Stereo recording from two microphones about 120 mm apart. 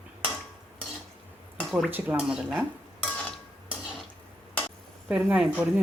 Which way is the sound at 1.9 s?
15° right (ahead or behind).